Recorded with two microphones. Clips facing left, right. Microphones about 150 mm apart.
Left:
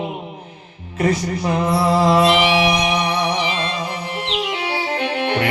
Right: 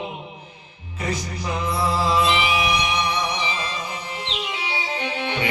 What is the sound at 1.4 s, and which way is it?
Music, 55° left (ahead or behind).